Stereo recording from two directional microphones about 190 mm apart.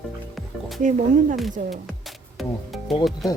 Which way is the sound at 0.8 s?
40° right (ahead or behind).